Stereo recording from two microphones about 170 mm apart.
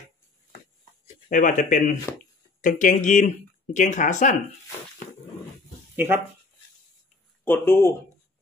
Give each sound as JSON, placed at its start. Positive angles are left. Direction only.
{"t": 1.3, "sound": "speech", "side_deg": 50}
{"t": 5.9, "sound": "speech", "side_deg": -10}
{"t": 7.4, "sound": "speech", "side_deg": 10}